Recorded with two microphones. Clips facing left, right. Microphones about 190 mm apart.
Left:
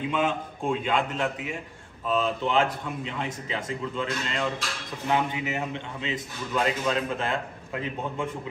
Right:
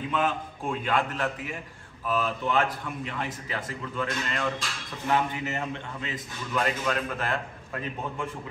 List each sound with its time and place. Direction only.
0.1 s a man's voice: 15° left (ahead or behind)